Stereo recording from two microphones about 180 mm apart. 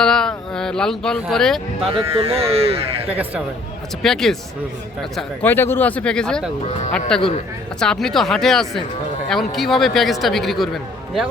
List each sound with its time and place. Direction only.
0.0 s speech: 5° left (ahead or behind)
1.9 s speech: 30° right (ahead or behind)
4.0 s speech: centre (ahead or behind)